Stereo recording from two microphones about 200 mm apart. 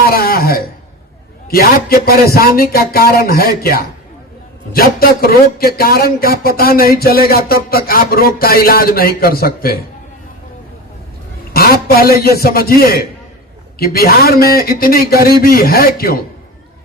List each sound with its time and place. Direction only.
0.0 s a sound: 50° left (ahead or behind)
1.5 s speech: 50° left (ahead or behind)
11.5 s speech: 50° left (ahead or behind)